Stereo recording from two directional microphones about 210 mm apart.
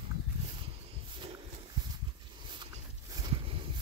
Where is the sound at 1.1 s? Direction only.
25° right (ahead or behind).